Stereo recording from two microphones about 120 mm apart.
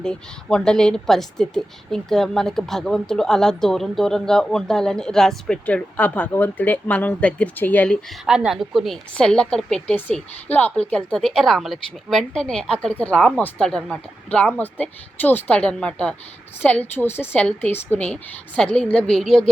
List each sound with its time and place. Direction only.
0.0 s a woman's voice: 5° left (ahead or behind)
8.2 s a woman's voice: 5° right (ahead or behind)